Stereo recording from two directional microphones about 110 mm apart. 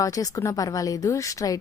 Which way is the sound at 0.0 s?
30° left (ahead or behind).